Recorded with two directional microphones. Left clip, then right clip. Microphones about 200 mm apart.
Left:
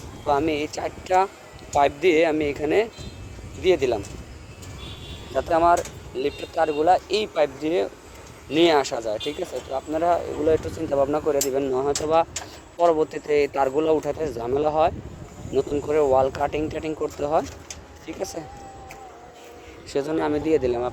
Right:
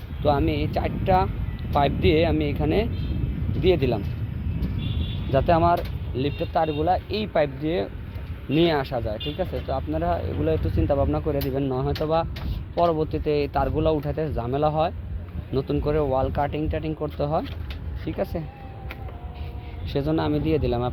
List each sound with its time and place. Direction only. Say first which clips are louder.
0.3 s speech: left 1 dB; 10° left (ahead or behind)
5.3 s speech: left 1 dB; 5° left (ahead or behind)
11.7 s speech: left 3 dB; 20° left (ahead or behind)
19.9 s speech: left 1 dB; 10° left (ahead or behind)